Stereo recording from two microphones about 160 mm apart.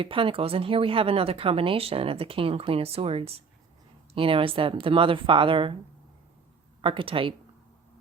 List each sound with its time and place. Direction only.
0.0 s speech: 35° right (ahead or behind)
6.8 s speech: 35° right (ahead or behind)